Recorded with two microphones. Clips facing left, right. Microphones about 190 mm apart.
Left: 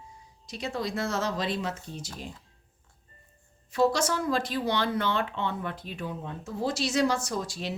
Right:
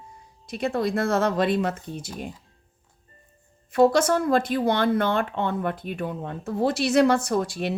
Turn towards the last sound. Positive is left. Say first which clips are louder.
# right 8 dB
turn(degrees=-60)  # may be behind; listen again after turning